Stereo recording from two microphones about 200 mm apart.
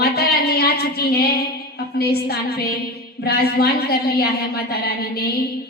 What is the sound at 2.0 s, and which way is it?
A woman's voice, 50° left (ahead or behind).